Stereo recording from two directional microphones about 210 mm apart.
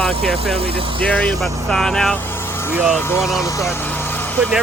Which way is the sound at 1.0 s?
5° left (ahead or behind).